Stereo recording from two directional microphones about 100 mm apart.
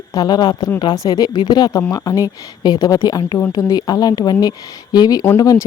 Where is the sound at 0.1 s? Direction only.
40° left (ahead or behind).